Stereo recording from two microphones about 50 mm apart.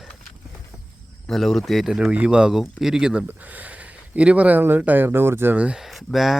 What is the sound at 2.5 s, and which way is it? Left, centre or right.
Speech, centre.